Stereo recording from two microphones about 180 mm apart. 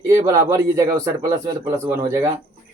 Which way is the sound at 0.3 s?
15° right (ahead or behind).